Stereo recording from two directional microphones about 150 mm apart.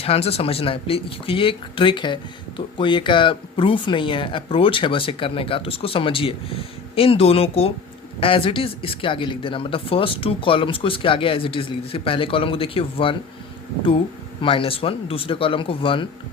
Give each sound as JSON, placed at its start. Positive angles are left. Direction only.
{"t": 0.0, "sound": "speech", "side_deg": 40}
{"t": 14.4, "sound": "speech", "side_deg": 35}